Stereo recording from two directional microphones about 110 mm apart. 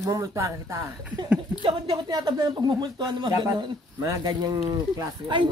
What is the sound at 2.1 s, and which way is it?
Speech, 35° right (ahead or behind).